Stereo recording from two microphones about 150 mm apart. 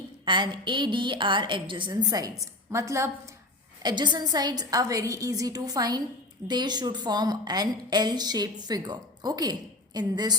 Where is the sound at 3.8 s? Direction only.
30° right (ahead or behind).